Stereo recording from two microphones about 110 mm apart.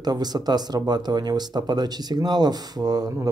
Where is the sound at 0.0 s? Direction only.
40° right (ahead or behind).